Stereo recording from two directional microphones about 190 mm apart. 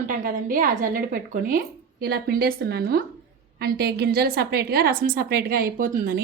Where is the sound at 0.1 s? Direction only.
45° right (ahead or behind).